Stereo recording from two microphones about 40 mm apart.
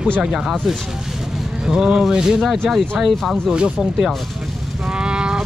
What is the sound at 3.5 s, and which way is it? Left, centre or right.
Speech, centre.